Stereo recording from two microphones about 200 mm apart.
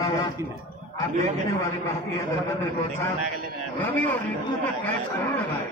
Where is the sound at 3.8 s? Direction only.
10° left (ahead or behind).